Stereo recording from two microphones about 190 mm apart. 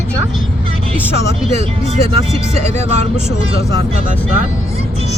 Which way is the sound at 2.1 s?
35° right (ahead or behind).